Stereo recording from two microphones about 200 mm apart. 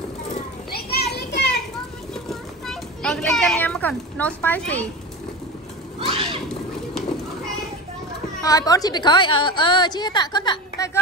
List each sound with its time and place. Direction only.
0.7 s children playing: 50° left (ahead or behind)
2.2 s children playing: centre (ahead or behind)
5.9 s a sound: 30° right (ahead or behind)
8.4 s a woman's voice: 15° left (ahead or behind)